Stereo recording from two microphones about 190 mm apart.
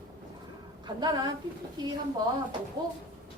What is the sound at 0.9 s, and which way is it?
Speech, 20° right (ahead or behind).